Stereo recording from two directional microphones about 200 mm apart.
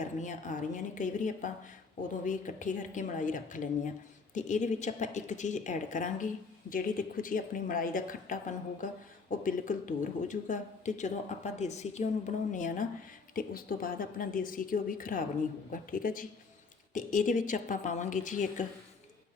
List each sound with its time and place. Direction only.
0.2 s a woman's voice: 40° left (ahead or behind)